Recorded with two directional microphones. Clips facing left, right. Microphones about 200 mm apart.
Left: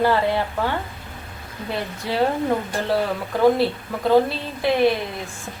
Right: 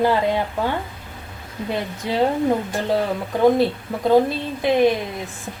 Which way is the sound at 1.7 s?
20° right (ahead or behind).